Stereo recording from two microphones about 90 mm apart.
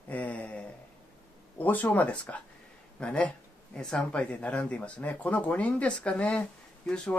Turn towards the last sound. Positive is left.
turn(degrees=10)  # may be behind; listen again after turning